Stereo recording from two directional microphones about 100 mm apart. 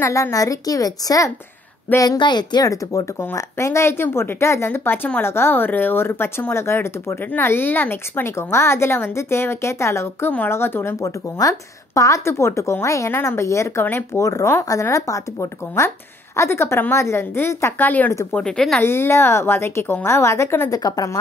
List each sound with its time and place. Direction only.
0.0 s a woman's voice: 30° left (ahead or behind)
2.7 s a woman's voice: 35° left (ahead or behind)
3.2 s a woman's voice: 25° left (ahead or behind)
18.3 s speech: 5° left (ahead or behind)
18.8 s a woman's voice: 25° left (ahead or behind)